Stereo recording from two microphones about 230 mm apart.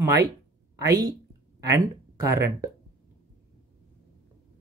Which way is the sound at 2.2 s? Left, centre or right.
Centre.